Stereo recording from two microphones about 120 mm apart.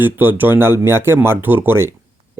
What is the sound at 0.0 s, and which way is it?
Speech, 15° right (ahead or behind).